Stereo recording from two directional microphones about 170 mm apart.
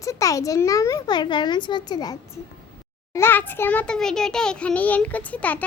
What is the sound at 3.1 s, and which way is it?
A child's voice, 15° left (ahead or behind).